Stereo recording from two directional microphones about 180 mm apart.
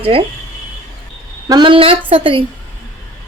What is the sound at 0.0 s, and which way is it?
Speech, 30° right (ahead or behind).